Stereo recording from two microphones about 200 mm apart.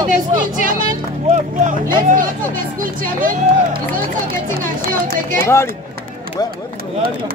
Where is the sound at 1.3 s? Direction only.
40° right (ahead or behind).